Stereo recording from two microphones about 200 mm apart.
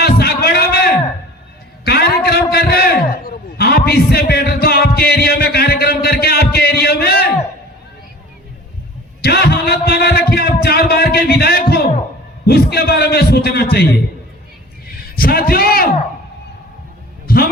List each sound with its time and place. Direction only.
0.0 s a sound: 50° left (ahead or behind)
9.2 s a man's voice: 50° left (ahead or behind)
15.1 s a man's voice: 50° left (ahead or behind)
17.2 s music: 50° left (ahead or behind)